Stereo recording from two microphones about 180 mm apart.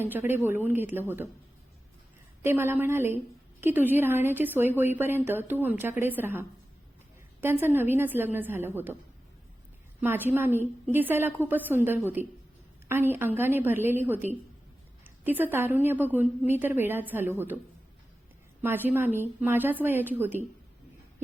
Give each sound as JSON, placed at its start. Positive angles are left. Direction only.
{"t": 0.0, "sound": "a woman's voice", "side_deg": -10}
{"t": 2.4, "sound": "a woman's voice", "side_deg": -15}
{"t": 7.4, "sound": "a woman's voice", "side_deg": -10}
{"t": 10.0, "sound": "a woman's voice", "side_deg": -10}
{"t": 18.6, "sound": "a woman's voice", "side_deg": -10}